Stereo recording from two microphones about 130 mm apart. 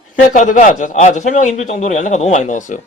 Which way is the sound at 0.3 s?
85° left.